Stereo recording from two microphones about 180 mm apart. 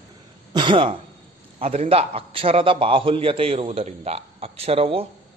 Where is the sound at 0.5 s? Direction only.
25° right (ahead or behind).